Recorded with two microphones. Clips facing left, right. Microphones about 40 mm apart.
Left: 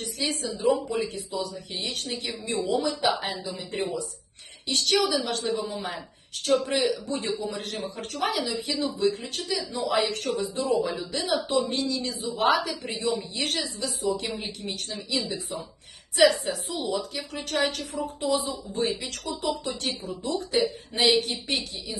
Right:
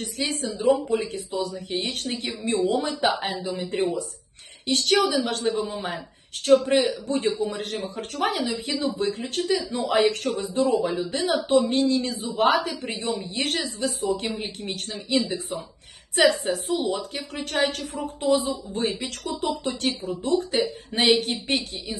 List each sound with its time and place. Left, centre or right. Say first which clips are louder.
0.0 s a woman's voice: right 2 dB; right
5.6 s a man's voice: right 2 dB; centre
6.7 s a woman's voice: right 4 dB; right
16.4 s a woman's voice: right 6 dB; right